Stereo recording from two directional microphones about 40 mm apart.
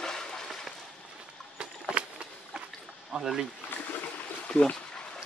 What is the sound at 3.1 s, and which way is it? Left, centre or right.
Speech, centre.